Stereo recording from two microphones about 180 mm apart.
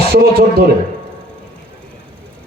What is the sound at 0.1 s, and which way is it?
Speech, 60° right (ahead or behind).